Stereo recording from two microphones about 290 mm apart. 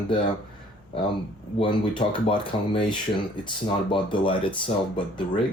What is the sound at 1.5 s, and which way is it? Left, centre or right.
Speech, centre.